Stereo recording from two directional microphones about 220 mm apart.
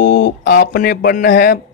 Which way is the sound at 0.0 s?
45° left (ahead or behind).